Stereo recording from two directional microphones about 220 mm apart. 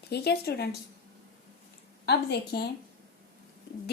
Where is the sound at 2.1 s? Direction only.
50° left (ahead or behind).